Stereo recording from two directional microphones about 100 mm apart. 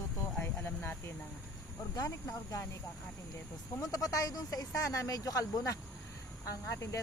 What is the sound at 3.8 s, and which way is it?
Speech, 35° left (ahead or behind).